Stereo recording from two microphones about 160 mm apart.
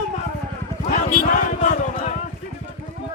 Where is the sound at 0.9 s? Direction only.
45° left (ahead or behind).